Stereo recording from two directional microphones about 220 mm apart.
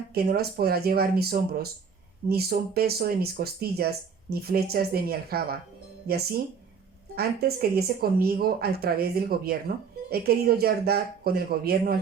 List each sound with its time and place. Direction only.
0.1 s a woman's voice: 45° right (ahead or behind)
7.2 s a woman's voice: 45° right (ahead or behind)